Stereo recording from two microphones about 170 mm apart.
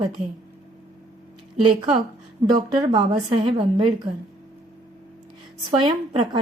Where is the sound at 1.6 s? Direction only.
30° right (ahead or behind).